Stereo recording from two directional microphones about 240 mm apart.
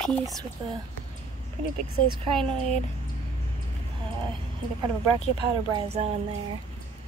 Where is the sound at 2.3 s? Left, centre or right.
Centre.